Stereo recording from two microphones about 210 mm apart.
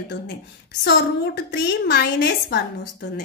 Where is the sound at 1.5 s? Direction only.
55° left (ahead or behind).